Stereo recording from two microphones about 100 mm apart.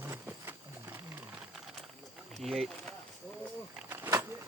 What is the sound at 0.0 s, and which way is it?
Wild animals, 25° right (ahead or behind).